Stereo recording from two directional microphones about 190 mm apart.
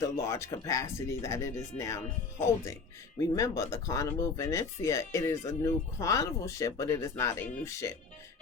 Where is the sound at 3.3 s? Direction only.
15° left (ahead or behind).